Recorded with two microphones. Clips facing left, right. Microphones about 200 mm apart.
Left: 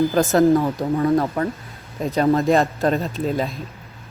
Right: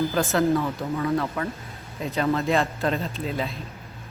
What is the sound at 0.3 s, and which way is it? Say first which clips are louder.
Speech: left 7 dB; 40° left (ahead or behind).